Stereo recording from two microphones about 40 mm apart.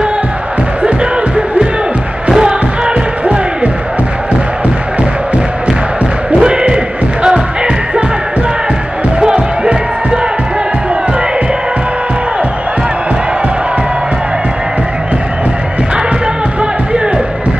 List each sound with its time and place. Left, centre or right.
0.8 s music: right
6.4 s a sound: right
7.2 s music: right
9.2 s music: right